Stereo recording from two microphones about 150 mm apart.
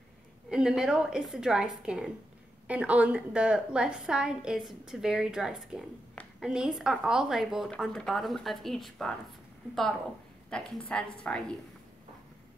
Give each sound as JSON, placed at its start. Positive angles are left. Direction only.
{"t": 0.5, "sound": "a woman's voice", "side_deg": -5}
{"t": 10.5, "sound": "a woman's voice", "side_deg": 5}